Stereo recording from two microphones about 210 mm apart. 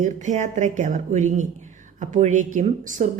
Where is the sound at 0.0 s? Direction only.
35° right (ahead or behind).